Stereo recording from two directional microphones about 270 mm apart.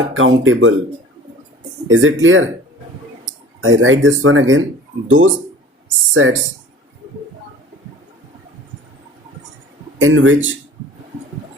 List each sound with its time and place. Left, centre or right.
0.2 s speech: right
1.9 s speech: right
3.6 s speech: right
10.0 s speech: right